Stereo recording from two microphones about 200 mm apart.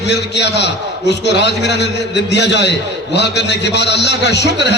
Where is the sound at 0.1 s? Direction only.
60° left (ahead or behind).